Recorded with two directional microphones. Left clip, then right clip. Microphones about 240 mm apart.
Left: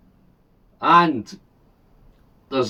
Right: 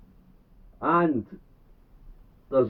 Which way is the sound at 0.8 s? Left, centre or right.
Left.